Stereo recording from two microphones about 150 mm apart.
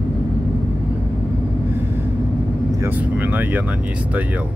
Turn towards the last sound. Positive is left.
turn(degrees=-10)  # may be behind; listen again after turning